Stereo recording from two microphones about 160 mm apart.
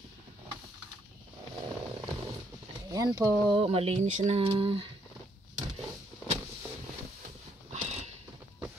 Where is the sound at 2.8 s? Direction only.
20° right (ahead or behind).